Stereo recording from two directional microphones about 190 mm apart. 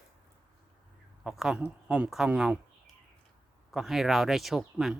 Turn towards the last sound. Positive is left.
turn(degrees=0)  # may be behind; listen again after turning